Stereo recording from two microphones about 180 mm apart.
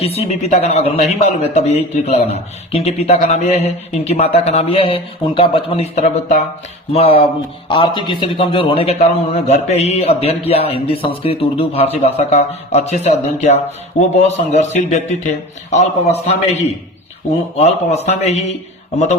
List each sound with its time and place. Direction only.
0.0 s a man's voice: 35° left (ahead or behind)
6.9 s a man's voice: 35° left (ahead or behind)